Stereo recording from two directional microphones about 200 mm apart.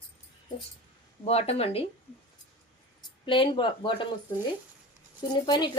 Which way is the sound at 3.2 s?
25° left (ahead or behind).